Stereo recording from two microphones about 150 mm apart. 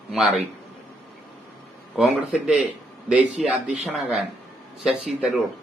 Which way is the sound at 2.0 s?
5° right (ahead or behind).